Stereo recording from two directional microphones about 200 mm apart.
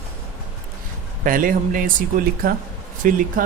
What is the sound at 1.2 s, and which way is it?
Speech, 45° right (ahead or behind).